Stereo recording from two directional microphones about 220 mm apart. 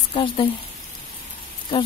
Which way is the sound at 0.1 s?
25° left (ahead or behind).